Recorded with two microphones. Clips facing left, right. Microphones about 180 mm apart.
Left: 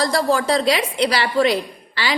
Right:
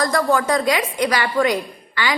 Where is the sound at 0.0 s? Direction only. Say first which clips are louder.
Even; 30° left (ahead or behind).